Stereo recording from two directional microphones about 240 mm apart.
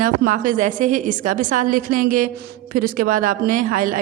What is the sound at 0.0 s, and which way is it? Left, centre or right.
A woman's voice, right.